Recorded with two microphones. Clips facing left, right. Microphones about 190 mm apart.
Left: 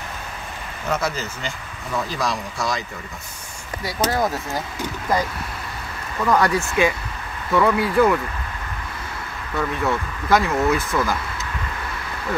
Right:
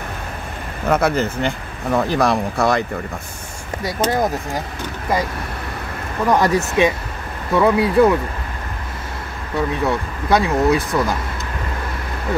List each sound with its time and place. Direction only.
0.8 s speech: 55° right (ahead or behind)
3.8 s speech: 20° right (ahead or behind)
6.2 s speech: 25° right (ahead or behind)
9.6 s speech: 15° right (ahead or behind)
10.5 s speech: 35° right (ahead or behind)